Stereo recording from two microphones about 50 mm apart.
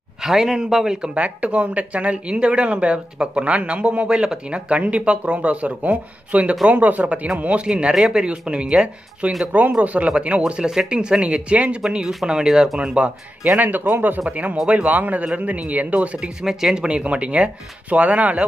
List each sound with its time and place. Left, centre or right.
0.2 s a man's voice: centre
1.1 s speech: right
7.9 s speech: centre
8.2 s speech: right
12.3 s a man's voice: centre
13.6 s speech: right
14.3 s speech: right
16.4 s a man's voice: centre
16.8 s speech: right